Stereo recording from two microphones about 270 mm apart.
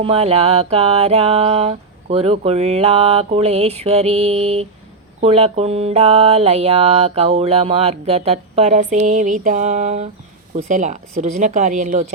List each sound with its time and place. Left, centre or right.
0.0 s mantra: right